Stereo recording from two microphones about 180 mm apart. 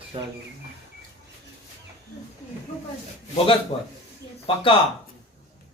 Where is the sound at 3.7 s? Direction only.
35° left (ahead or behind).